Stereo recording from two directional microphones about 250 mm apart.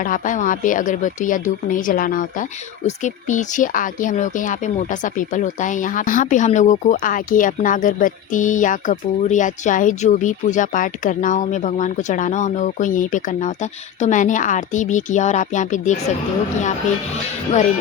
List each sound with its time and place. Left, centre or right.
0.0 s a woman's voice: left